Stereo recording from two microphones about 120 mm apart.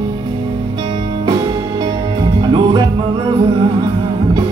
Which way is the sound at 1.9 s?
50° right (ahead or behind).